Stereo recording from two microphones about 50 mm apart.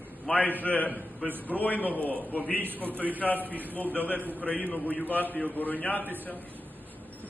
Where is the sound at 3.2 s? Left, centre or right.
Centre.